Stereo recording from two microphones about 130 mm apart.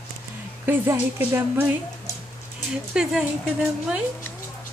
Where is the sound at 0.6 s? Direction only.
15° right (ahead or behind).